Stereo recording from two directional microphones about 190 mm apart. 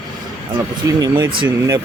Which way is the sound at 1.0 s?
25° right (ahead or behind).